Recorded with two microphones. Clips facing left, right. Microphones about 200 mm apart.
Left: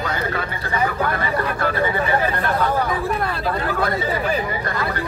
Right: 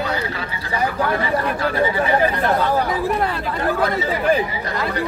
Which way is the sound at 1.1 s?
55° left (ahead or behind).